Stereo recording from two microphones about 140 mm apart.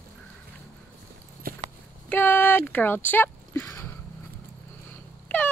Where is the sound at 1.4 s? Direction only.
90° right.